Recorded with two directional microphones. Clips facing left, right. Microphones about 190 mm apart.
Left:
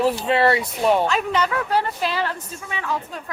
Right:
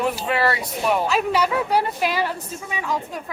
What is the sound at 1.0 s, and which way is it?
Speech, 5° right (ahead or behind).